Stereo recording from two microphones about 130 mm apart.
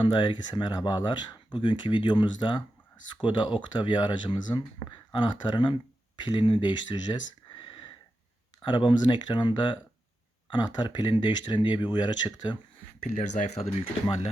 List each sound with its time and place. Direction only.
0.0 s speech: 35° left (ahead or behind)
7.6 s sniff: 40° left (ahead or behind)
8.6 s speech: 40° left (ahead or behind)
13.0 s speech: 70° left (ahead or behind)